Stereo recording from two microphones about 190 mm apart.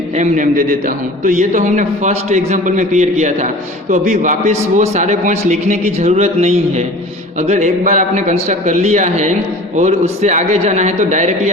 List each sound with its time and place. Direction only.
0.2 s a man's voice: 45° right (ahead or behind)